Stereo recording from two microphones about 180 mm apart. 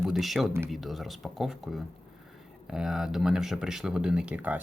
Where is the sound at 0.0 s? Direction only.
Centre (ahead or behind).